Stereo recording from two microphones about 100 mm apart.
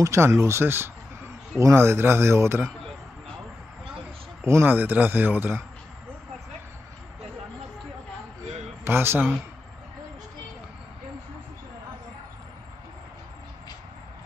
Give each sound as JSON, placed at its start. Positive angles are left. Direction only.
{"t": 0.0, "sound": "speech", "side_deg": -30}
{"t": 4.5, "sound": "speech", "side_deg": -25}
{"t": 8.8, "sound": "speech", "side_deg": -25}